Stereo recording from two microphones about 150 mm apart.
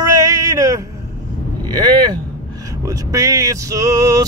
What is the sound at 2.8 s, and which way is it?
Speech, 20° right (ahead or behind).